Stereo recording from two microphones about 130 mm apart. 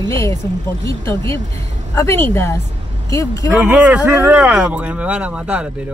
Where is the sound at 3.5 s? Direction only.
10° right (ahead or behind).